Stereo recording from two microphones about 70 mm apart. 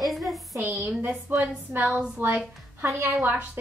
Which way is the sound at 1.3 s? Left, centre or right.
Right.